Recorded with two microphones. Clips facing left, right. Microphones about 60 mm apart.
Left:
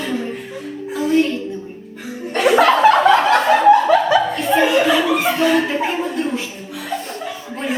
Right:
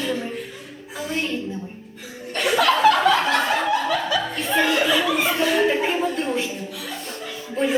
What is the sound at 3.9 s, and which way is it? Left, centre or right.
Chuckle, left.